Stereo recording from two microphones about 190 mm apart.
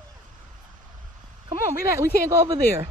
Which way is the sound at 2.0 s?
15° right (ahead or behind).